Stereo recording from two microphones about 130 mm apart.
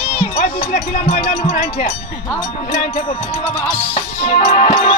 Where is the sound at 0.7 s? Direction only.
75° left (ahead or behind); by 1.9 s 60° left (ahead or behind).